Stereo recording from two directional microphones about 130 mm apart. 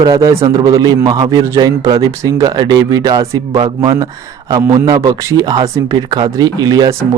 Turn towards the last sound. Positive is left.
turn(degrees=-30)  # may be behind; listen again after turning